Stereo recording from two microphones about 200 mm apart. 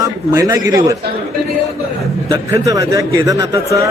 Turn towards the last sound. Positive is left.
turn(degrees=-15)  # may be behind; listen again after turning